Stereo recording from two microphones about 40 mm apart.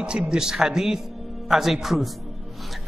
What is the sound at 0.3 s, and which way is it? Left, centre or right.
A man's voice, centre.